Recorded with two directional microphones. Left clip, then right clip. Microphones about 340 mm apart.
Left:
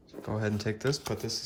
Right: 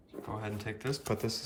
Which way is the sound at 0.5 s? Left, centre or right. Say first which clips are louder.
Left 6 dB; centre.